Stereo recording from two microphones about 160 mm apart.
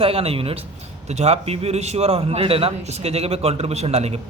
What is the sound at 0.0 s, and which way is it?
A man's voice, 35° right (ahead or behind).